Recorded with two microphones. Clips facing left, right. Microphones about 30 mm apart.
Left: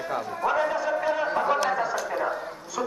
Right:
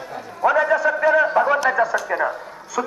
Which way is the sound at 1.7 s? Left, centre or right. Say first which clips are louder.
Right 7 dB; right.